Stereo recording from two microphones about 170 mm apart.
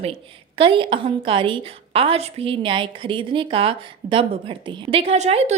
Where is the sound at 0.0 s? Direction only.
35° right (ahead or behind).